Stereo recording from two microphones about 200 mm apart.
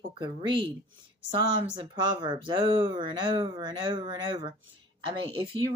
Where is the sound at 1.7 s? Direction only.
25° right (ahead or behind).